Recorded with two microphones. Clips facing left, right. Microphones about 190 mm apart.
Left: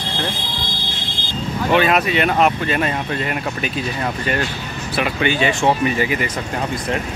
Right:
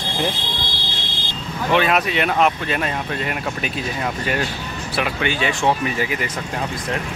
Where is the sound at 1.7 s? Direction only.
Centre (ahead or behind).